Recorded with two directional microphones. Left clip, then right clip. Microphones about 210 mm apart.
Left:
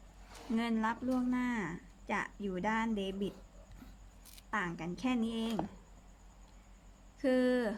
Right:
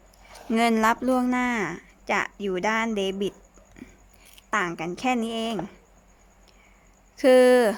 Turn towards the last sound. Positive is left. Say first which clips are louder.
# right 15 dB
turn(degrees=-50)  # may be behind; listen again after turning